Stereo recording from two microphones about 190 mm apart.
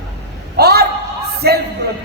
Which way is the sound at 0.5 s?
55° right (ahead or behind).